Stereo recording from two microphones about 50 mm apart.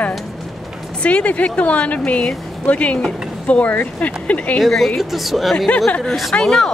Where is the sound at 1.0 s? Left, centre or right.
Left.